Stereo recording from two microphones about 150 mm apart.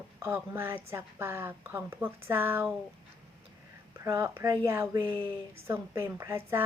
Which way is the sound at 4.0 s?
20° right (ahead or behind).